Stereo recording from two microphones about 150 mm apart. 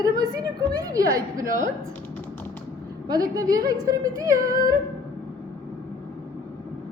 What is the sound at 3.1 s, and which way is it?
A woman's voice, 25° right (ahead or behind).